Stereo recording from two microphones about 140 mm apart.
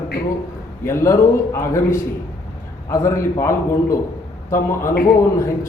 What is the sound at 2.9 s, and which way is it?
A man's voice, 20° left (ahead or behind).